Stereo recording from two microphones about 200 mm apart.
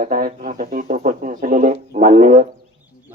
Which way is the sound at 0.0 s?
40° right (ahead or behind).